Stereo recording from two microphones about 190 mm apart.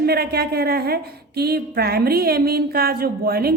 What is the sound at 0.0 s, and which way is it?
A woman's voice, 55° right (ahead or behind).